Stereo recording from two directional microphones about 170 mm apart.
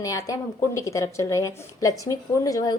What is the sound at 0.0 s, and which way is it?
A woman's voice, 20° left (ahead or behind).